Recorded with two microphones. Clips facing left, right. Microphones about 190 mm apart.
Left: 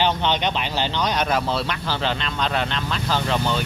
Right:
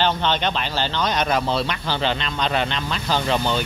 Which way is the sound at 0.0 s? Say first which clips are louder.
Even; 15° left (ahead or behind).